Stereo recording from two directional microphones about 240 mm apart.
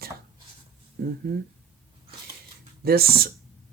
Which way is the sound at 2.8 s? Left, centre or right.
Right.